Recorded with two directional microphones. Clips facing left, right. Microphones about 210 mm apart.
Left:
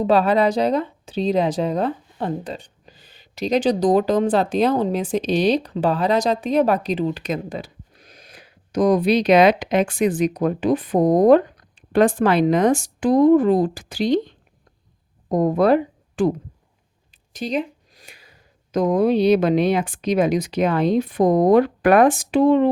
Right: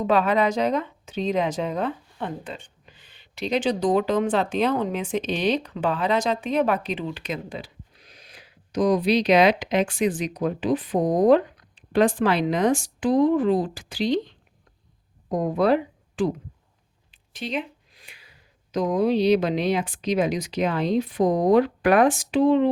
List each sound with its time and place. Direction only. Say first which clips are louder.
0.0 s speech: left 4 dB; 35° left (ahead or behind)
17.3 s speech: left 5 dB; 40° left (ahead or behind)